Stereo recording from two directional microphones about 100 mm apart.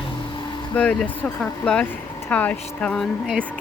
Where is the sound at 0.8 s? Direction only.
10° left (ahead or behind).